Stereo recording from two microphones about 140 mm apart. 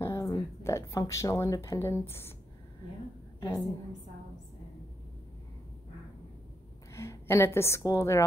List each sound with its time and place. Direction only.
0.0 s a woman's voice: 25° left (ahead or behind)
3.3 s a woman's voice: 20° left (ahead or behind)
6.9 s a woman's voice: 20° left (ahead or behind)